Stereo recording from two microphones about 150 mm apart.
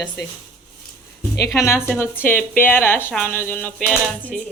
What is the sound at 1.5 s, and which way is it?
A woman's voice, 20° left (ahead or behind).